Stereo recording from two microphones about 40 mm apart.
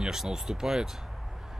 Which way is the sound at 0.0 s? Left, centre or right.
Centre.